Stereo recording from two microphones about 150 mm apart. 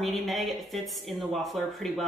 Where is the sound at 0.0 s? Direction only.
Centre (ahead or behind).